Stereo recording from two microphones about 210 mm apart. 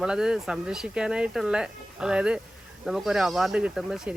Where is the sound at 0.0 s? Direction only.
5° right (ahead or behind).